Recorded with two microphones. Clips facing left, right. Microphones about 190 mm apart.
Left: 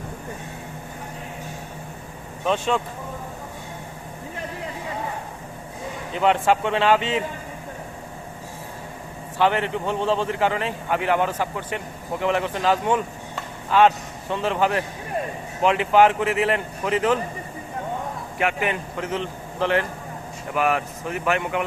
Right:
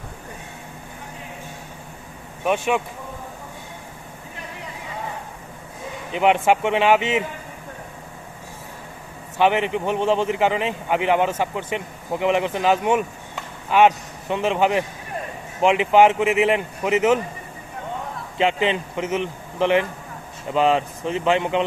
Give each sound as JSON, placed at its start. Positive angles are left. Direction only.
{"t": 2.4, "sound": "speech", "side_deg": -15}
{"t": 6.1, "sound": "speech", "side_deg": -20}
{"t": 9.4, "sound": "speech", "side_deg": -15}
{"t": 18.3, "sound": "speech", "side_deg": -20}